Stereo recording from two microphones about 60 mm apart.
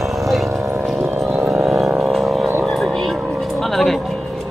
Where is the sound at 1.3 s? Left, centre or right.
Centre.